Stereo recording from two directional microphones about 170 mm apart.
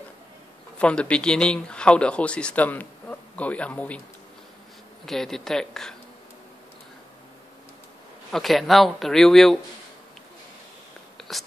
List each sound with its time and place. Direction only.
0.7 s speech: 5° left (ahead or behind)
5.0 s speech: centre (ahead or behind)
8.3 s speech: centre (ahead or behind)
11.1 s whispering: centre (ahead or behind)